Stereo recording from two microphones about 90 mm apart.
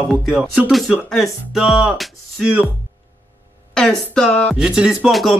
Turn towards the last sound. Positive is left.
turn(degrees=0)  # may be behind; listen again after turning